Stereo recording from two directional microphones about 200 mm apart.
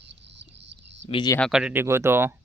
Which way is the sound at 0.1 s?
60° right (ahead or behind).